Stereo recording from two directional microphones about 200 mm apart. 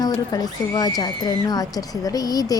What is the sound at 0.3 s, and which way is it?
A woman's voice, 20° left (ahead or behind).